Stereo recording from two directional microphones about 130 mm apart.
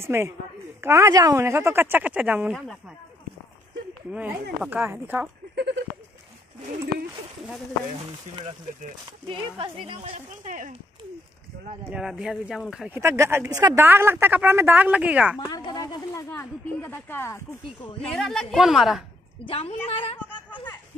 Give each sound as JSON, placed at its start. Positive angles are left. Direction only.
{"t": 0.0, "sound": "speech", "side_deg": -20}
{"t": 2.5, "sound": "speech", "side_deg": 0}
{"t": 4.1, "sound": "a woman's voice", "side_deg": -10}
{"t": 9.3, "sound": "a woman's voice", "side_deg": -45}
{"t": 10.4, "sound": "speech", "side_deg": -85}
{"t": 11.9, "sound": "speech", "side_deg": -5}
{"t": 12.9, "sound": "speech", "side_deg": -20}
{"t": 13.8, "sound": "a woman's voice", "side_deg": -20}
{"t": 15.4, "sound": "speech", "side_deg": 35}
{"t": 16.3, "sound": "speech", "side_deg": 15}
{"t": 18.0, "sound": "speech", "side_deg": 5}
{"t": 19.4, "sound": "a woman's voice", "side_deg": 50}